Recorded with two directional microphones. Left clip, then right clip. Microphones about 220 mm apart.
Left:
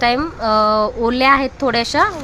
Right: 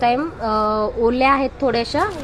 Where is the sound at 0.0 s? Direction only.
20° left (ahead or behind).